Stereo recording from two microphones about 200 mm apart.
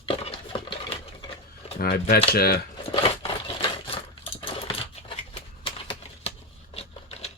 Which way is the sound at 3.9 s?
30° left (ahead or behind).